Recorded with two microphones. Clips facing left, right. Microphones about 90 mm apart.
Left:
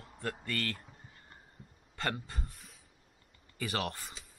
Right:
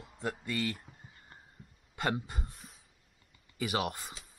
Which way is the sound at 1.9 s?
15° right (ahead or behind).